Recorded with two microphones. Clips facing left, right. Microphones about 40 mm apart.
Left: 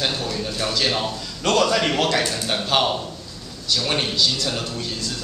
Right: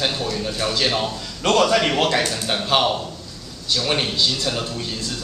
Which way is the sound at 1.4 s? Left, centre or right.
Right.